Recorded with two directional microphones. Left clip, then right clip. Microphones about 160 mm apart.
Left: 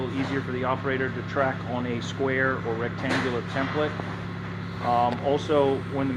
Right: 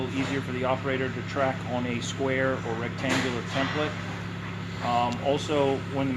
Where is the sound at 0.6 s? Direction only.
85° right.